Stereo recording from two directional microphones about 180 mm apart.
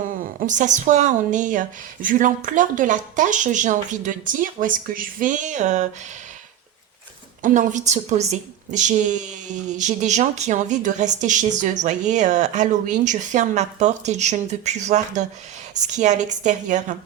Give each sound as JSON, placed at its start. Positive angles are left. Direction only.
{"t": 0.2, "sound": "a woman's voice", "side_deg": -45}
{"t": 7.4, "sound": "a woman's voice", "side_deg": -45}